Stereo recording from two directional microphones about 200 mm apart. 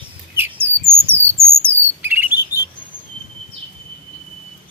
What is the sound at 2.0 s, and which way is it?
Chirp, 10° right (ahead or behind).